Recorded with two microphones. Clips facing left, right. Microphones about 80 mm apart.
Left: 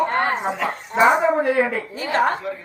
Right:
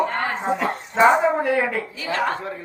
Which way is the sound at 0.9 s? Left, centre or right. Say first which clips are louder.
Even; centre.